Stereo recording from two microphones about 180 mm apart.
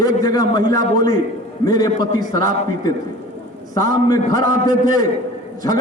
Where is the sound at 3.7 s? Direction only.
20° left (ahead or behind).